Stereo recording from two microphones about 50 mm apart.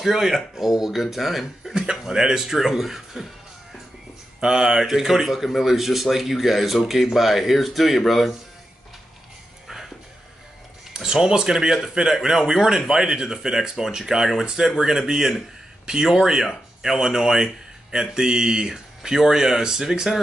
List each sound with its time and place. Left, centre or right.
0.0 s speech: centre
4.4 s speech: centre
10.9 s speech: centre